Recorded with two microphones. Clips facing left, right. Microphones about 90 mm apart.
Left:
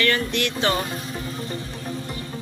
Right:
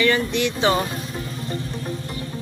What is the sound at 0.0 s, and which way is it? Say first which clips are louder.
Speech: right 3 dB; 10° right (ahead or behind).